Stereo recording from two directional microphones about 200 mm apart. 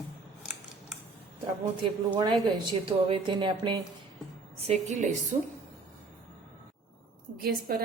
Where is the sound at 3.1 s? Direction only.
25° right (ahead or behind).